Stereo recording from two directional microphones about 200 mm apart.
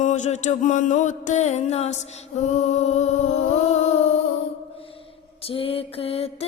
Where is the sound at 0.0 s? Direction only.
35° left (ahead or behind).